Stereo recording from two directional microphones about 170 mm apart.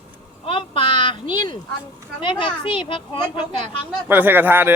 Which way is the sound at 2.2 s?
30° left (ahead or behind).